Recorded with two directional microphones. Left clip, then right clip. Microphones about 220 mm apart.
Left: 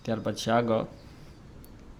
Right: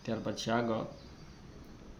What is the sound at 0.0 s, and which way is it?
Speech, 30° left (ahead or behind).